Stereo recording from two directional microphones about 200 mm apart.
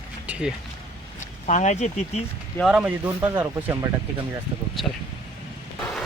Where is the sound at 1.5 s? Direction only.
35° left (ahead or behind).